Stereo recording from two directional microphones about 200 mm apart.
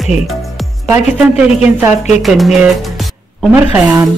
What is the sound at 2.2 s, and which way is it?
Speech, centre (ahead or behind).